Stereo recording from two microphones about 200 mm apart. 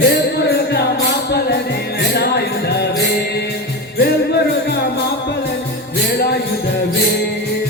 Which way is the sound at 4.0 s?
55° left (ahead or behind).